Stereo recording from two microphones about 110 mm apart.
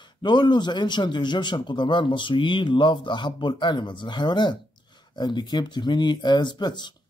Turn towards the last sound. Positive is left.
turn(degrees=40)  # may be behind; listen again after turning